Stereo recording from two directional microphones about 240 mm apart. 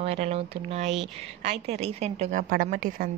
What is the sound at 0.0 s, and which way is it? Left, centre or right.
A woman's voice, right.